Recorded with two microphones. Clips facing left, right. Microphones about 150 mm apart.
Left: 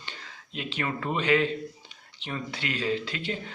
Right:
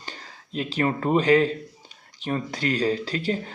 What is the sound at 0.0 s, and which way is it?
A man's voice, 40° right (ahead or behind).